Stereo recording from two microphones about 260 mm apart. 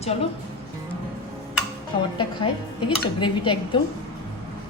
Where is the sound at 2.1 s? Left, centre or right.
Centre.